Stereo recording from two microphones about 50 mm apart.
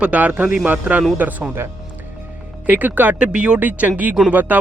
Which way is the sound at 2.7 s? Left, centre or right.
Right.